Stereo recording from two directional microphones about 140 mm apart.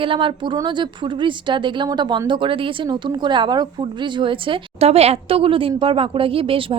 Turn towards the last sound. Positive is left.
turn(degrees=-40)  # may be behind; listen again after turning